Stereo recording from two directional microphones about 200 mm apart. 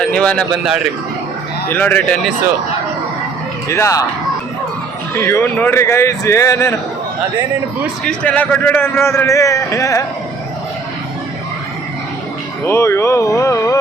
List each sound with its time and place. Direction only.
0.0 s a man's voice: 5° left (ahead or behind)
3.7 s a man's voice: 15° left (ahead or behind)
5.1 s a man's voice: 15° left (ahead or behind)
8.0 s a man's voice: 5° left (ahead or behind)
12.6 s a man's voice: 10° left (ahead or behind)